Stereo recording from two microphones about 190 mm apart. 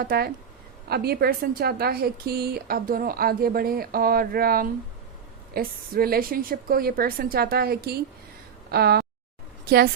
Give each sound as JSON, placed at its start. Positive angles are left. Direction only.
{"t": 0.0, "sound": "a woman's voice", "side_deg": -50}